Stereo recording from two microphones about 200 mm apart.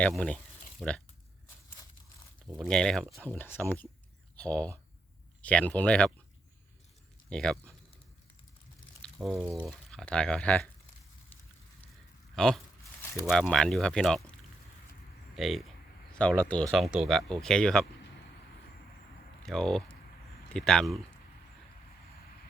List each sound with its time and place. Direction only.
0.0 s speech: 5° left (ahead or behind)
2.6 s speech: 5° left (ahead or behind)
7.3 s speech: 5° left (ahead or behind)
9.0 s a sound: 5° left (ahead or behind)
9.5 s speech: centre (ahead or behind)
12.3 s a sound: centre (ahead or behind)
13.2 s speech: centre (ahead or behind)
15.4 s speech: centre (ahead or behind)
19.4 s speech: 5° left (ahead or behind)